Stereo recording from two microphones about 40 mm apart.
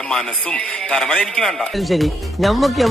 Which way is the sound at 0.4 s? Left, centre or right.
Left.